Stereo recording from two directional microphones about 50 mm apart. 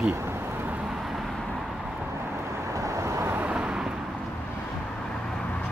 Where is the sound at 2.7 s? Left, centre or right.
Right.